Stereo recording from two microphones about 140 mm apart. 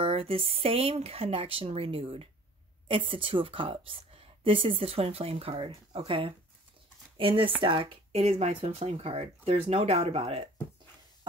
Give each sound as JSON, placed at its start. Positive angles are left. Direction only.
{"t": 0.0, "sound": "a woman's voice", "side_deg": -40}